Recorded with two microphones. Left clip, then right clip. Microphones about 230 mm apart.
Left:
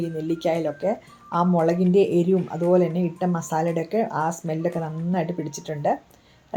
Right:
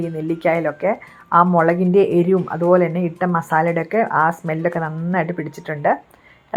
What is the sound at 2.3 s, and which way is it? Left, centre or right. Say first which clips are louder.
Speech: right 5 dB; centre.